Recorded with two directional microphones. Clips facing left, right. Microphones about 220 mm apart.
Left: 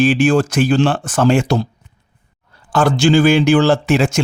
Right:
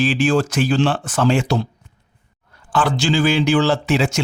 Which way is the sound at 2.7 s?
45° left (ahead or behind).